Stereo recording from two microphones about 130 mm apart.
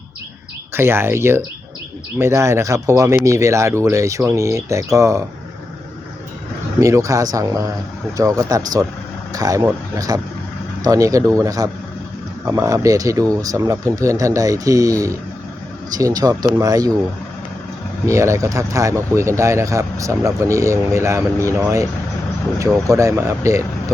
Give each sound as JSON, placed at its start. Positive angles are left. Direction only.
{"t": 0.7, "sound": "speech", "side_deg": -20}
{"t": 6.7, "sound": "speech", "side_deg": -25}
{"t": 18.0, "sound": "speech", "side_deg": -20}
{"t": 22.9, "sound": "speech", "side_deg": -25}